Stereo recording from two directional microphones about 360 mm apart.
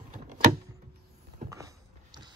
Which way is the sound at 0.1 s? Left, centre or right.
Right.